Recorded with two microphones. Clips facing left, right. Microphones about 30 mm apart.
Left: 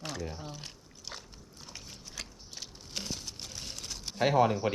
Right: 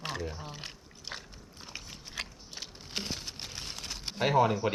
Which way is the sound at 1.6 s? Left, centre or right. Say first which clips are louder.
Right 3 dB; right.